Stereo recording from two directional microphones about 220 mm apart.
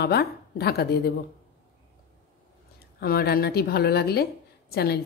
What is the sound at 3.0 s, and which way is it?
A woman's voice, 45° left (ahead or behind).